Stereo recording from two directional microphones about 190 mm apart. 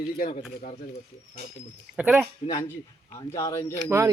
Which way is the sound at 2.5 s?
15° left (ahead or behind).